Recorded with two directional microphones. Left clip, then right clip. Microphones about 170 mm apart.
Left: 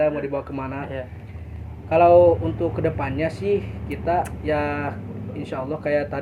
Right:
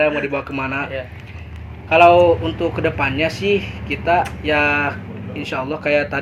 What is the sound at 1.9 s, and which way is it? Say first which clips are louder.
A man's voice: right 3 dB; 5° right (ahead or behind).